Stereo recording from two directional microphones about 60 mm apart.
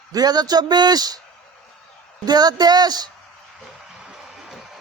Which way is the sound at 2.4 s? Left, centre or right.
Right.